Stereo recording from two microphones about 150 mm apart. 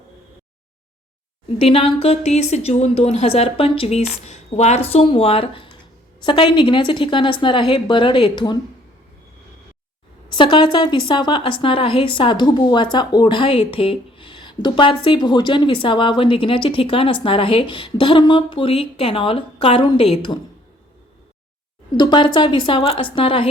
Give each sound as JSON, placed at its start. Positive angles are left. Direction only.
{"t": 1.5, "sound": "a woman's voice", "side_deg": 40}
{"t": 10.3, "sound": "a woman's voice", "side_deg": 35}
{"t": 21.9, "sound": "a woman's voice", "side_deg": 30}